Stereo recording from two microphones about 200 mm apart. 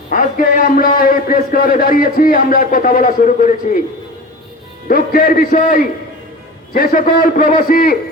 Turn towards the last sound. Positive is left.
turn(degrees=45)  # may be behind; listen again after turning